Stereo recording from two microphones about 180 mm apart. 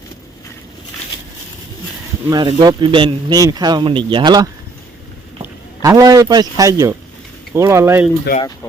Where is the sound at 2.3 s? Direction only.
25° right (ahead or behind).